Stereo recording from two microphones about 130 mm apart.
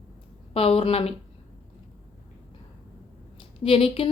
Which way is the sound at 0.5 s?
50° left (ahead or behind).